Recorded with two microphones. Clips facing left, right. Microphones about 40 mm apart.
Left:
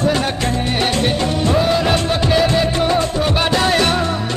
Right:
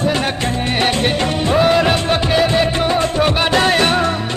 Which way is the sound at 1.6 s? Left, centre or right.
Right.